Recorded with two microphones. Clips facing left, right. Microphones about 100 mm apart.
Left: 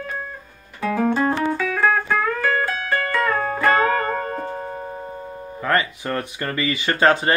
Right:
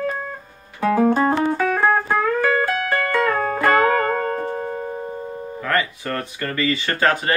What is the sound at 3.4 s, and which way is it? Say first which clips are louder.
Music: right 1 dB; 40° right (ahead or behind).